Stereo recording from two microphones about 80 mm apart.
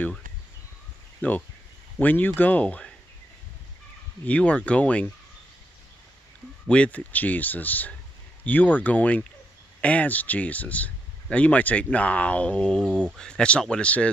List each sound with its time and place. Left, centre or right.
1.2 s speech: left
4.3 s speech: centre
6.7 s speech: centre